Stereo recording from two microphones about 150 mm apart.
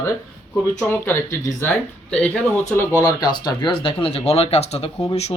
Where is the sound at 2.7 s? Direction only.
20° left (ahead or behind).